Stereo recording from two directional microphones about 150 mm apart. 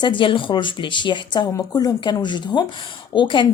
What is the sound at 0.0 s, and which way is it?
A woman's voice, 35° left (ahead or behind).